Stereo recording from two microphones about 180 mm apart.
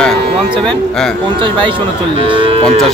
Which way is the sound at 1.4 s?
25° right (ahead or behind).